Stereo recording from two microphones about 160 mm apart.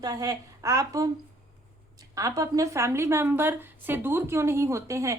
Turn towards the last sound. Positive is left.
turn(degrees=-20)  # may be behind; listen again after turning